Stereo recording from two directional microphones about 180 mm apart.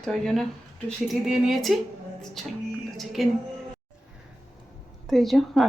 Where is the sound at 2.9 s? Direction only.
Centre (ahead or behind).